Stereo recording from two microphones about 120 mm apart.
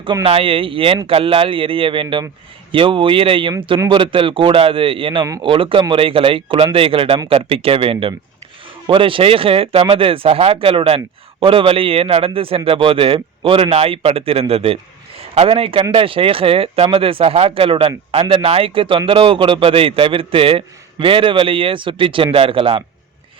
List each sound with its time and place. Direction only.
0.0 s speech: 40° right (ahead or behind)
0.3 s speech: 50° right (ahead or behind)